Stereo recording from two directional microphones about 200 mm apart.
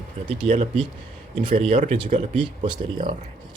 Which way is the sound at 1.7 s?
40° right (ahead or behind).